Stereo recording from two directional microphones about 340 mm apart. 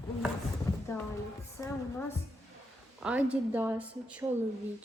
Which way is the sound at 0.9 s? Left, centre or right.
Centre.